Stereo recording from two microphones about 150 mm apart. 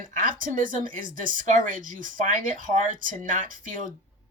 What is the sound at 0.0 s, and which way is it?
Speech, 60° right (ahead or behind).